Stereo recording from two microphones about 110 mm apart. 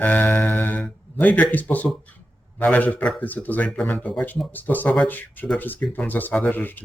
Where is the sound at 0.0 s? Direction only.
15° left (ahead or behind).